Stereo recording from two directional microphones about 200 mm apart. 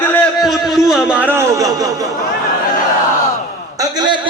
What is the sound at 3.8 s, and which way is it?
Speech, 20° right (ahead or behind).